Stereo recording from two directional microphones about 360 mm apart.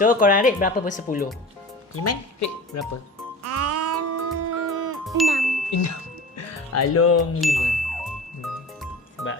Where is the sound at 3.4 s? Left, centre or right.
Right.